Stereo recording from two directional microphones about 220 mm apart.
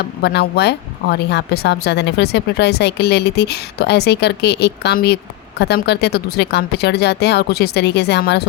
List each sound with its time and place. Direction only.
0.0 s speech: 50° left (ahead or behind)